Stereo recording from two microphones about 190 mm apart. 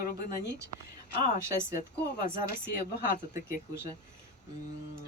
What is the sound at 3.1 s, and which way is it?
Speech, 50° left (ahead or behind).